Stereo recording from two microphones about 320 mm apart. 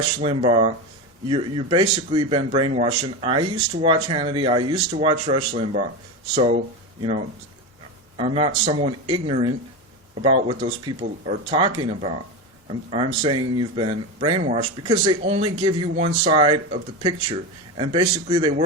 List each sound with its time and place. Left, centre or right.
0.2 s speech: centre
17.7 s speech: centre